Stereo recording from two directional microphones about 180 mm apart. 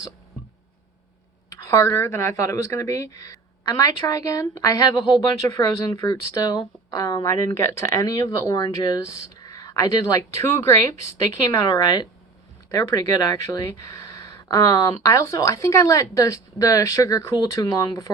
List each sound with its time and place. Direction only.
1.5 s a woman's voice: 15° left (ahead or behind)